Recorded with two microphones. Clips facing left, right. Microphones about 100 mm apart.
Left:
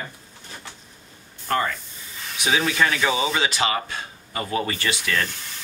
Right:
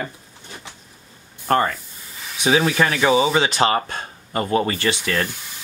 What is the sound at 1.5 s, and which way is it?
Speech, 40° right (ahead or behind).